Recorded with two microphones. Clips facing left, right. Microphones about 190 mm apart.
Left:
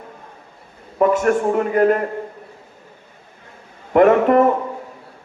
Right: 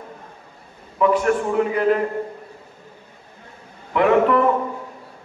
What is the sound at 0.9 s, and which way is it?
A man's voice, 45° left (ahead or behind).